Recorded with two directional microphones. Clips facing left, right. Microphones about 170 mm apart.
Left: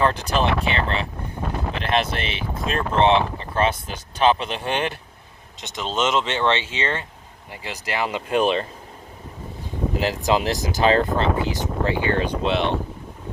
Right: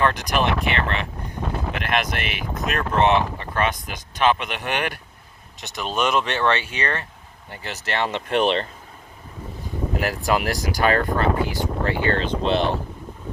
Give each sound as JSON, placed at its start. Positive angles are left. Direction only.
{"t": 0.0, "sound": "speech", "side_deg": 30}
{"t": 10.0, "sound": "speech", "side_deg": 20}
{"t": 12.4, "sound": "speech", "side_deg": 0}